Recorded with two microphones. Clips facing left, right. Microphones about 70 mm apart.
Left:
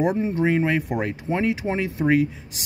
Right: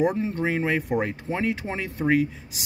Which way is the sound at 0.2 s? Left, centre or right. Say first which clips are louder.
Left 4 dB; centre.